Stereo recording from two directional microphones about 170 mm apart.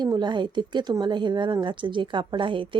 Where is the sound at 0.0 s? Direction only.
25° right (ahead or behind).